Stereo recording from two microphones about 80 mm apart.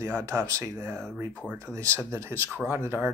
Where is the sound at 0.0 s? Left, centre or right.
Right.